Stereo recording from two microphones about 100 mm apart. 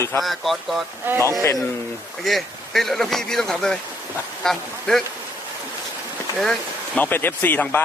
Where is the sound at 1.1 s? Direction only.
20° right (ahead or behind).